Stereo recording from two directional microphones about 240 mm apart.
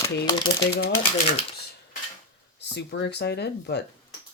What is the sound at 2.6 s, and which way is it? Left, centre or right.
Speech, left.